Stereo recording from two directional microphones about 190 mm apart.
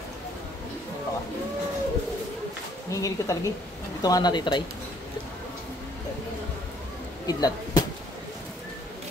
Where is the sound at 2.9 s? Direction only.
15° left (ahead or behind).